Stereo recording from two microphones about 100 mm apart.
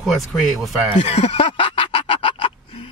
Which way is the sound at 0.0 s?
Centre (ahead or behind).